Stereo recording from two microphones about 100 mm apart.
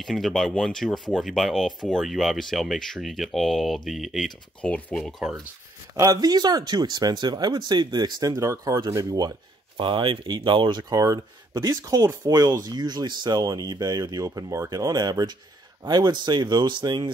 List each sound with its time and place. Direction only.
0.0 s speech: centre (ahead or behind)
4.6 s speech: 15° left (ahead or behind)
5.9 s speech: 35° right (ahead or behind)
9.8 s speech: 55° right (ahead or behind)